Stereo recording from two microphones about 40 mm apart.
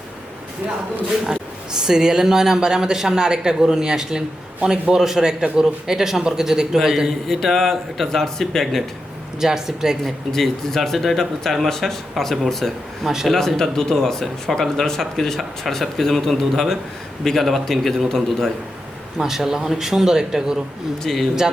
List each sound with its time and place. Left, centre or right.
1.3 s speech: centre
7.4 s a man's voice: centre
9.4 s speech: centre
10.0 s a man's voice: centre
13.1 s speech: centre
13.3 s speech: centre
19.2 s speech: centre
21.0 s speech: centre